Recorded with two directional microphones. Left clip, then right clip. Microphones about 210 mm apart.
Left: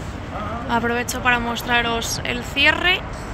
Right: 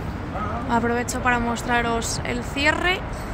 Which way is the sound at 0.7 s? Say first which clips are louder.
Left 2 dB; 5° right (ahead or behind).